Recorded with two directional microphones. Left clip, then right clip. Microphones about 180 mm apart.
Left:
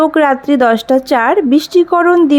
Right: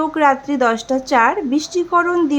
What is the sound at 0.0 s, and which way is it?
A woman's voice, 35° left (ahead or behind).